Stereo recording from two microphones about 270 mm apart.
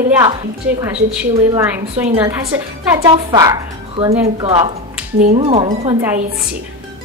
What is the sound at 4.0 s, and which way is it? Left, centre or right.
Speech, centre.